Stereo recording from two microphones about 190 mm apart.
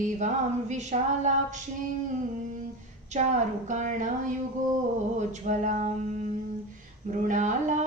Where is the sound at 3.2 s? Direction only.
35° right (ahead or behind).